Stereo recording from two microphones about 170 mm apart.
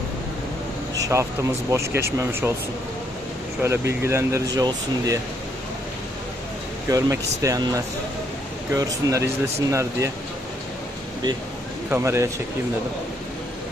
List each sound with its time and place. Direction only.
0.9 s speech: 20° right (ahead or behind)
3.6 s speech: 15° right (ahead or behind)
6.8 s speech: 20° right (ahead or behind)
8.7 s speech: 20° right (ahead or behind)
11.9 s speech: 15° right (ahead or behind)